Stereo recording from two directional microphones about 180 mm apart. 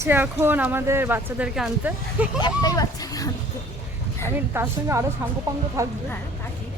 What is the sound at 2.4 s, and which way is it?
Speech, 20° left (ahead or behind).